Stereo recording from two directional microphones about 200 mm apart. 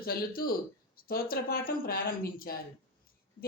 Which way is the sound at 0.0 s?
50° left (ahead or behind).